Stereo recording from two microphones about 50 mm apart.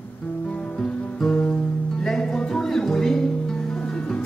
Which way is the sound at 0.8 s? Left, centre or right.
Centre.